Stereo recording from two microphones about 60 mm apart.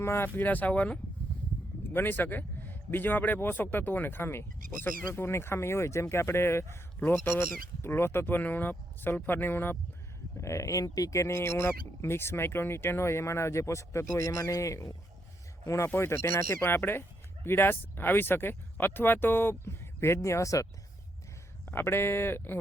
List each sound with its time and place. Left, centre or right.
0.0 s speech: left
0.3 s speech: left
1.9 s speech: left
10.4 s speech: left
20.2 s speech: left
21.7 s speech: left